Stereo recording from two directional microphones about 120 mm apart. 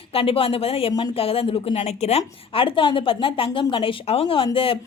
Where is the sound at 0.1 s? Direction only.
50° left (ahead or behind).